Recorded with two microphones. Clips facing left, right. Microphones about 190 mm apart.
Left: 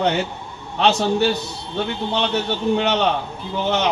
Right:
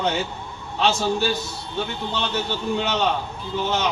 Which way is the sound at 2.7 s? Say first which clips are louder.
Left 4 dB; 65° left (ahead or behind).